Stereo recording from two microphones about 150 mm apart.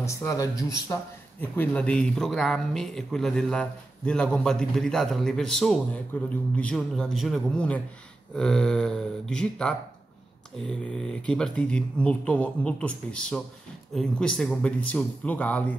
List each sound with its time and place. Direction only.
0.0 s speech: 20° left (ahead or behind)
1.4 s speech: 10° left (ahead or behind)